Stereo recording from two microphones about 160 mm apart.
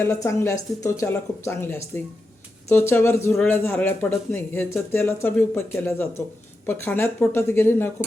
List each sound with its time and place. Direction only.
0.1 s speech: 20° left (ahead or behind)